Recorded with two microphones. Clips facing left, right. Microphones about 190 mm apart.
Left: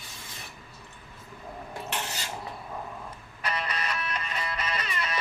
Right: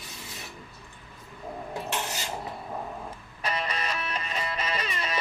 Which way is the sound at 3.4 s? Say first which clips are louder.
Right 1 dB; 25° right (ahead or behind).